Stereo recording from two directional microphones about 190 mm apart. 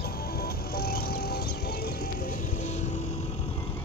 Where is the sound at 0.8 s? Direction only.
55° left (ahead or behind).